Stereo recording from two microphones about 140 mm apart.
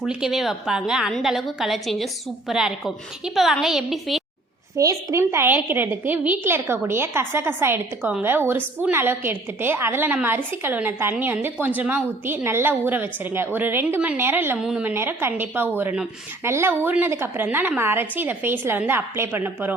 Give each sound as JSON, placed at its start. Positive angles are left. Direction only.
{"t": 0.0, "sound": "a woman's voice", "side_deg": -5}
{"t": 4.8, "sound": "a woman's voice", "side_deg": -20}